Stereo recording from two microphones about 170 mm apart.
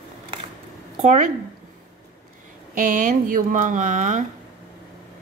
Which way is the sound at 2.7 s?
50° right (ahead or behind).